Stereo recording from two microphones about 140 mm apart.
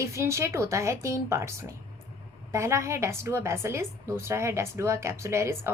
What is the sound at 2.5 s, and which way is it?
A woman's voice, 20° right (ahead or behind).